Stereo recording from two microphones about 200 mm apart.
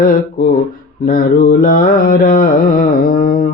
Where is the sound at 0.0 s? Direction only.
45° left (ahead or behind).